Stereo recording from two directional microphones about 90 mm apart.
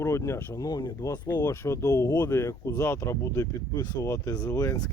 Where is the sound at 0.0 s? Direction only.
30° left (ahead or behind).